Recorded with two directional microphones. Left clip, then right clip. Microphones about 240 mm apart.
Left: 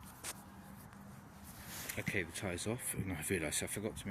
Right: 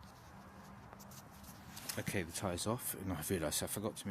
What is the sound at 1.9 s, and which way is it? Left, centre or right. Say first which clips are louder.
Speech: left 2 dB; right.